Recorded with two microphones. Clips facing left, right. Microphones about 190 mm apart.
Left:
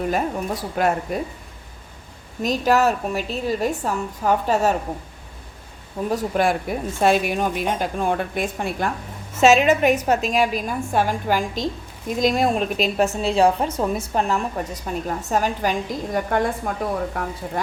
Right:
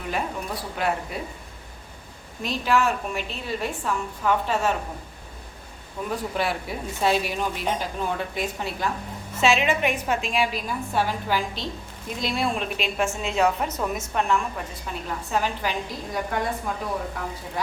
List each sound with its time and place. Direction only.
0.0 s a woman's voice: 45° left (ahead or behind)
2.4 s a woman's voice: 40° left (ahead or behind)
6.1 s a woman's voice: 50° left (ahead or behind)